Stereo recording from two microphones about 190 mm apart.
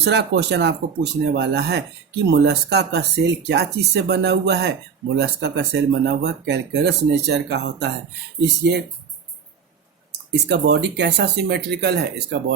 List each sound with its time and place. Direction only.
0.0 s speech: 60° right (ahead or behind)
10.3 s speech: 60° right (ahead or behind)